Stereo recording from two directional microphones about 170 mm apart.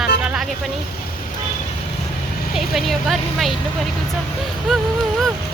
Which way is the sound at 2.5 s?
Centre (ahead or behind).